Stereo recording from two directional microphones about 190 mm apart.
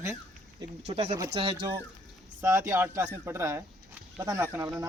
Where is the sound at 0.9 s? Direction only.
35° right (ahead or behind).